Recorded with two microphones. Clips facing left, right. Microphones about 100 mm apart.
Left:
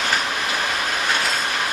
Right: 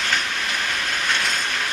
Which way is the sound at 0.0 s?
10° left (ahead or behind).